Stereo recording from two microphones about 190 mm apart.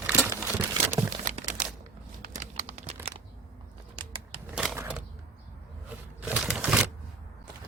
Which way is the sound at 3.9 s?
25° right (ahead or behind).